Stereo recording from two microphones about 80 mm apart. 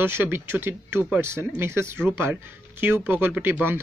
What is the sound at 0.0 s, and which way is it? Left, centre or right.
Speech, right.